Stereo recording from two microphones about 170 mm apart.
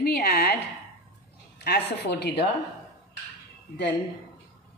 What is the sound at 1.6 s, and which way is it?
Speech, 75° left (ahead or behind).